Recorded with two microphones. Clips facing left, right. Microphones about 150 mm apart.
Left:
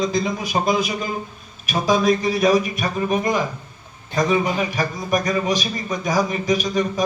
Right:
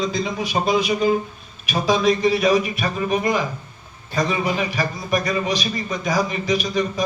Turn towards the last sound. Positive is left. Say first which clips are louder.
# left 1 dB
turn(degrees=45)  # may be behind; listen again after turning